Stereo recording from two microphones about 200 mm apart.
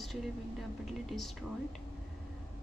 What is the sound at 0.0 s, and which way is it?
A woman's voice, centre (ahead or behind).